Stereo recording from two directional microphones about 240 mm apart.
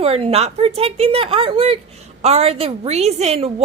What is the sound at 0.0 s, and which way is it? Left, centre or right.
A woman's voice, right.